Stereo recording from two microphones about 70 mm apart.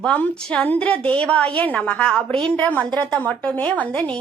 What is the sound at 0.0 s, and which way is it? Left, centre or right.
A woman's voice, centre.